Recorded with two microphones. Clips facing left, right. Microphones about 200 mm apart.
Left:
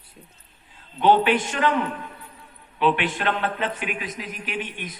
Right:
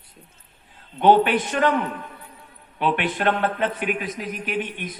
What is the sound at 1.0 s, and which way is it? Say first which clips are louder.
Speech: right 2 dB; 50° right (ahead or behind).